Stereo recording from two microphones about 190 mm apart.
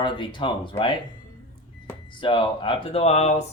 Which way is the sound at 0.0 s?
25° left (ahead or behind).